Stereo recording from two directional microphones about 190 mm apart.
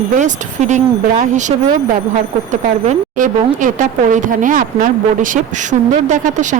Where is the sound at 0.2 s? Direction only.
40° right (ahead or behind).